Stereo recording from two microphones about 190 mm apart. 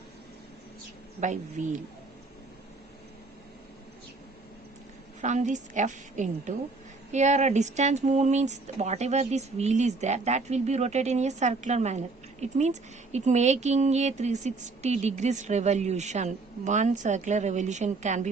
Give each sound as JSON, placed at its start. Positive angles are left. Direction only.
{"t": 1.2, "sound": "speech", "side_deg": -40}
{"t": 5.2, "sound": "speech", "side_deg": -40}